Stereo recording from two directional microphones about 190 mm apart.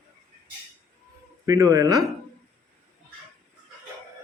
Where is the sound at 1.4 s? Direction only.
20° right (ahead or behind).